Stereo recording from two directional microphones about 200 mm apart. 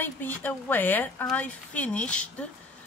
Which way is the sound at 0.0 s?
10° left (ahead or behind).